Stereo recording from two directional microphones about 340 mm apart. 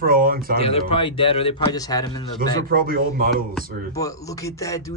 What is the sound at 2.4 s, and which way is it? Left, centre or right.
A man's voice, right.